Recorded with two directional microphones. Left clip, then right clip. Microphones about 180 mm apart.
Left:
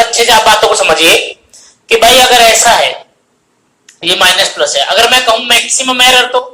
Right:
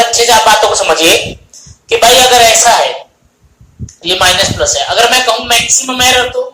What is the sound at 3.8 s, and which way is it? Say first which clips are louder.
Speech: left 2 dB; 25° left (ahead or behind).